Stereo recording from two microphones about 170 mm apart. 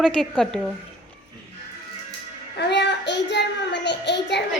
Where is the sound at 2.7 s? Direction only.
90° left.